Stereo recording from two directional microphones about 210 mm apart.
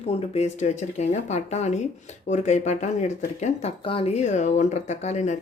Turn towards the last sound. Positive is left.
turn(degrees=30)  # may be behind; listen again after turning